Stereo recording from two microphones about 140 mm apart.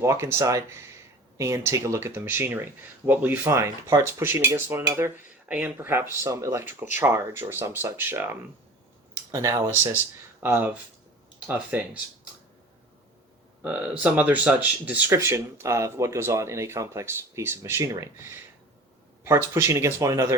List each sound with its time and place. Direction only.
0.0 s speech: 20° right (ahead or behind)
13.6 s speech: 10° right (ahead or behind)